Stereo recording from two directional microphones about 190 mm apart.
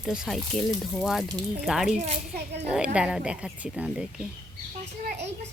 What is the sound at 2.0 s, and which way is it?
Speech, 35° right (ahead or behind).